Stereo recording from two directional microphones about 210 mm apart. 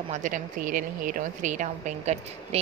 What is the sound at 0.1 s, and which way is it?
Speech, 40° right (ahead or behind).